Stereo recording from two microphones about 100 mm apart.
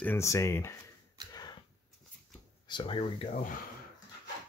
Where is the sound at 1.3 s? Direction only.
40° left (ahead or behind).